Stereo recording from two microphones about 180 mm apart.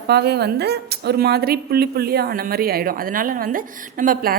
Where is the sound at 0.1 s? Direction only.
65° right (ahead or behind).